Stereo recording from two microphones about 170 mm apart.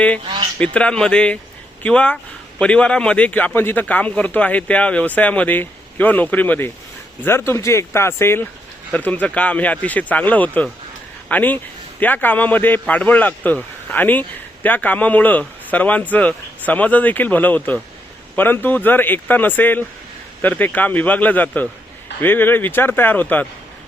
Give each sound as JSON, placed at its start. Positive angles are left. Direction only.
{"t": 0.6, "sound": "a man's voice", "side_deg": 5}